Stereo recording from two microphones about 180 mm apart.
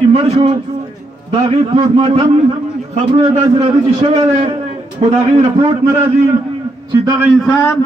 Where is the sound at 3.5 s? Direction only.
30° right (ahead or behind).